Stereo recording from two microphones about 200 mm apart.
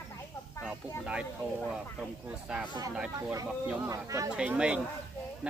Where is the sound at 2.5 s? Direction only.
5° right (ahead or behind).